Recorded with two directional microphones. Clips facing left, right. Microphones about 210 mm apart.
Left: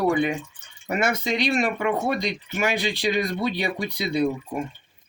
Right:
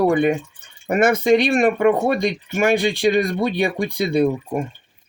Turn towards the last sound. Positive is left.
turn(degrees=-55)  # may be behind; listen again after turning